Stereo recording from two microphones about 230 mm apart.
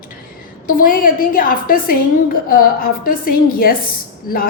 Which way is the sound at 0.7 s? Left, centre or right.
Left.